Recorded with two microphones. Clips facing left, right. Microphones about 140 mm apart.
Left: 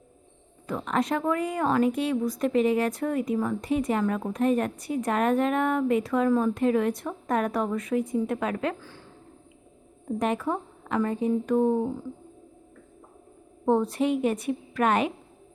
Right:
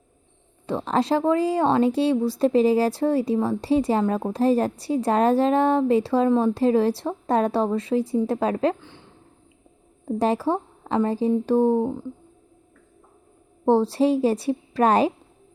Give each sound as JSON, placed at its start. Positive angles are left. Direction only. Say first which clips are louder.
{"t": 0.7, "sound": "speech", "louder": "right 5 dB", "side_deg": -30}
{"t": 10.1, "sound": "speech", "louder": "right 5 dB", "side_deg": -30}
{"t": 13.7, "sound": "speech", "louder": "right 5 dB", "side_deg": -30}